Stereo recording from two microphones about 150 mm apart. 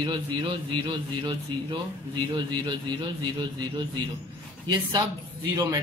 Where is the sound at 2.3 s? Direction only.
30° right (ahead or behind).